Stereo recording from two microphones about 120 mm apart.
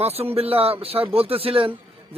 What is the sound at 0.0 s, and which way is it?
Speech, 60° right (ahead or behind).